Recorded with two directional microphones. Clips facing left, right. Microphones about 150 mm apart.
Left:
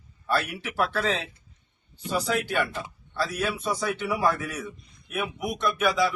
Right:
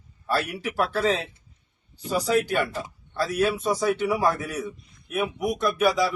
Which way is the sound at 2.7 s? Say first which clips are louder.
Right 2 dB; 40° right (ahead or behind).